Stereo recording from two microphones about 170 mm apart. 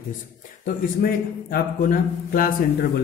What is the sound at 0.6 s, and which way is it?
A man's voice, 60° left (ahead or behind).